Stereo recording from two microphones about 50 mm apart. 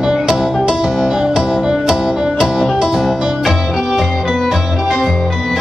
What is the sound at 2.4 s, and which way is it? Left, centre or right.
Music, centre.